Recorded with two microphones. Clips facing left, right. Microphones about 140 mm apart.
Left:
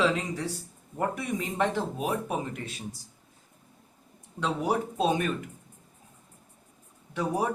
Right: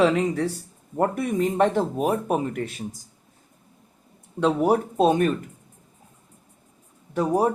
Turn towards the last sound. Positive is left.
turn(degrees=-45)  # may be behind; listen again after turning